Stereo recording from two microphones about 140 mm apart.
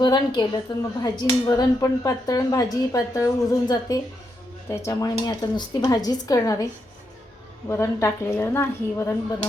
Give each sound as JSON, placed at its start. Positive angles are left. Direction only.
{"t": 0.0, "sound": "a woman's voice", "side_deg": 30}
{"t": 7.7, "sound": "speech", "side_deg": 20}